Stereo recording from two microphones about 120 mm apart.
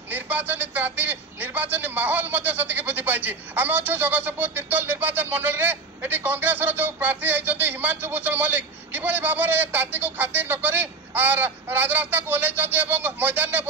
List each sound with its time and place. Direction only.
0.1 s a man's voice: 15° right (ahead or behind)